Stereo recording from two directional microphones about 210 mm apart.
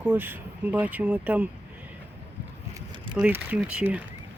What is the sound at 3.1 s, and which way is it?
Speech, 5° right (ahead or behind).